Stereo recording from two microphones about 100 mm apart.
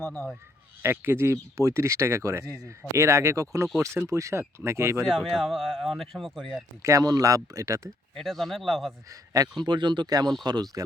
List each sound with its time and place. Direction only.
0.8 s speech: 25° right (ahead or behind)
5.0 s speech: 5° left (ahead or behind)
6.8 s speech: 35° right (ahead or behind)
8.1 s speech: 5° left (ahead or behind)
9.0 s speech: 35° right (ahead or behind)
9.6 s speech: 50° right (ahead or behind)